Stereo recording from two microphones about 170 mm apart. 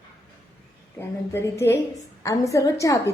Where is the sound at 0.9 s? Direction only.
15° left (ahead or behind).